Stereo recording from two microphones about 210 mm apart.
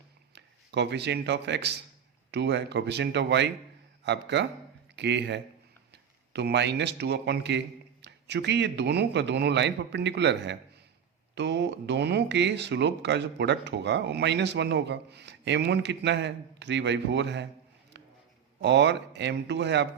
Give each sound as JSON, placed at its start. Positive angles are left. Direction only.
{"t": 0.3, "sound": "a man's voice", "side_deg": -55}
{"t": 18.0, "sound": "a sound", "side_deg": -55}
{"t": 18.6, "sound": "speech", "side_deg": -55}